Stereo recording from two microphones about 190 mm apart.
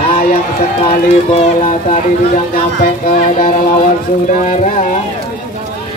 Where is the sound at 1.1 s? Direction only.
30° left (ahead or behind).